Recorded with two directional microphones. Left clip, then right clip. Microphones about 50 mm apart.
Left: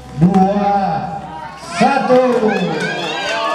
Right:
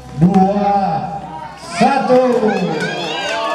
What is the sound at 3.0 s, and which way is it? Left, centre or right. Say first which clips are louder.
Run: left 1 dB; left.